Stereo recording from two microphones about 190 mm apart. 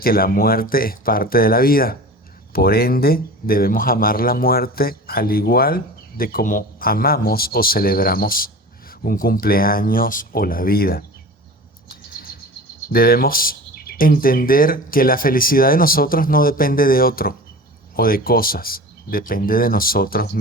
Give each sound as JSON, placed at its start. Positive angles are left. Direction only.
{"t": 0.0, "sound": "speech", "side_deg": 50}
{"t": 11.9, "sound": "chirp", "side_deg": 50}
{"t": 12.9, "sound": "speech", "side_deg": 50}